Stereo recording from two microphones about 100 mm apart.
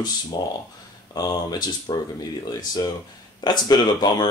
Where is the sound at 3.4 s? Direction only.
45° left (ahead or behind).